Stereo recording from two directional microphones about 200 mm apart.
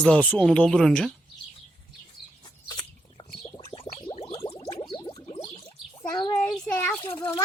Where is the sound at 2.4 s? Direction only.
20° left (ahead or behind).